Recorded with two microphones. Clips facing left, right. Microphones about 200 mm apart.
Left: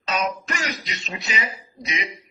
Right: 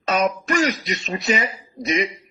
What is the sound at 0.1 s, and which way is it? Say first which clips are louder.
A man's voice: right 6 dB; 50° right (ahead or behind).